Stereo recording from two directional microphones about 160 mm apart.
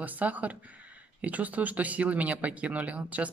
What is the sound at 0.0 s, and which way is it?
Speech, 10° right (ahead or behind).